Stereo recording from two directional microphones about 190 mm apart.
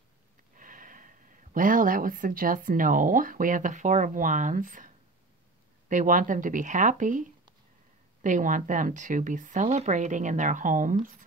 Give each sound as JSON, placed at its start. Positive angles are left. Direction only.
{"t": 0.6, "sound": "speech", "side_deg": -45}